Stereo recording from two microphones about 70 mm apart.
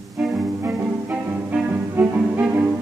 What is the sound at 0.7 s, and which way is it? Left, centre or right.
Music, centre.